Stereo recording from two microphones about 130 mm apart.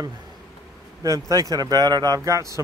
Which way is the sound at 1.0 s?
25° right (ahead or behind).